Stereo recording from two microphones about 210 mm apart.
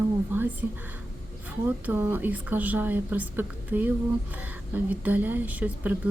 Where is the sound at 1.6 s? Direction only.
10° right (ahead or behind).